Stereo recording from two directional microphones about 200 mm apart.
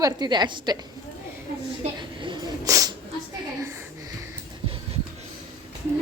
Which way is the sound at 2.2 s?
20° right (ahead or behind).